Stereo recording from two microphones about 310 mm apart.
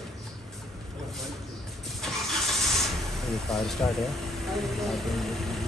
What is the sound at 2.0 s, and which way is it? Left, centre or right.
Vehicle, centre.